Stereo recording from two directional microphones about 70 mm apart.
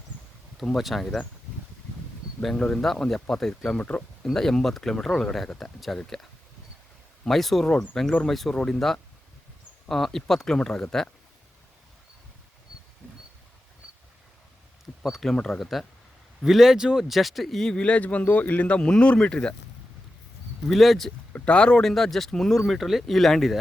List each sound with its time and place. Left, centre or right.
0.6 s speech: centre
2.4 s speech: centre
3.8 s speech: centre
4.3 s speech: centre
7.3 s speech: centre
15.0 s speech: centre
20.7 s speech: centre
21.3 s speech: centre